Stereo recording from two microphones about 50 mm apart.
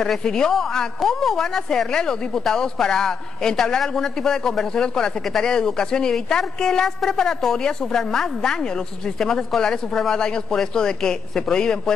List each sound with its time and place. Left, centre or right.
0.2 s a woman's voice: centre